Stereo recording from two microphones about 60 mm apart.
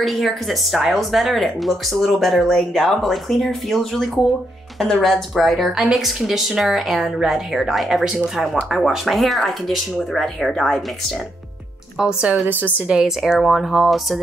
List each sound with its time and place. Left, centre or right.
0.0 s speech: centre
12.0 s speech: centre
12.4 s a woman's voice: right
12.8 s speech: centre